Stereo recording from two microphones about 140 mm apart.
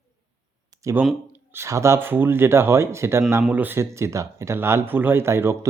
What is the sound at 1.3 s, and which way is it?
Speech, 20° right (ahead or behind).